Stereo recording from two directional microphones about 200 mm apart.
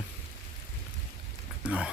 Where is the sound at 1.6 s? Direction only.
5° right (ahead or behind).